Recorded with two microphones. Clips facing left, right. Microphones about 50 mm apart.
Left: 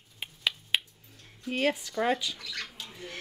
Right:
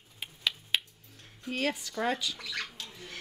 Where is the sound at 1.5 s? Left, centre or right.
Centre.